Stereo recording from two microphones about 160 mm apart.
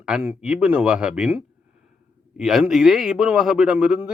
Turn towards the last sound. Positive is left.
turn(degrees=-5)  # may be behind; listen again after turning